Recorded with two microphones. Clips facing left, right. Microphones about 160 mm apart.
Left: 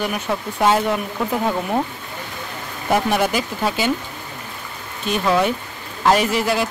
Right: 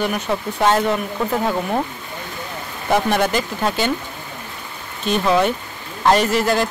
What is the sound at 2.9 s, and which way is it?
Speech, 5° left (ahead or behind).